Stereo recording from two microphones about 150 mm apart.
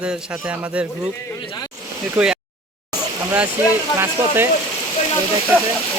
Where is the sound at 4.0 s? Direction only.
15° right (ahead or behind).